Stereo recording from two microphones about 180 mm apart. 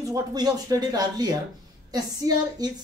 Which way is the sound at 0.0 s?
20° right (ahead or behind).